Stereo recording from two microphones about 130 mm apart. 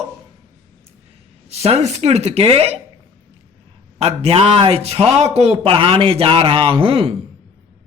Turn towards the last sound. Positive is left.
turn(degrees=-45)  # may be behind; listen again after turning